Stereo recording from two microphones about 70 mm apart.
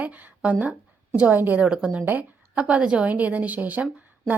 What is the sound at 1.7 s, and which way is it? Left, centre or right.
Speech, centre.